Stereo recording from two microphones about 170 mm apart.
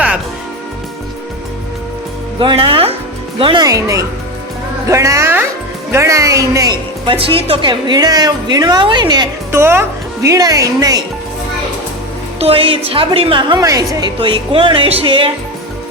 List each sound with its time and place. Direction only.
2.4 s a woman's voice: 30° right (ahead or behind)
12.4 s a woman's voice: 35° right (ahead or behind)